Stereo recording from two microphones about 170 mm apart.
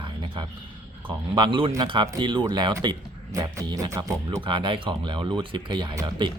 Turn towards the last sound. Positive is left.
turn(degrees=-25)  # may be behind; listen again after turning